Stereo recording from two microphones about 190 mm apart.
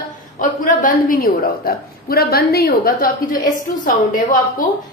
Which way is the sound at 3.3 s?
20° left (ahead or behind).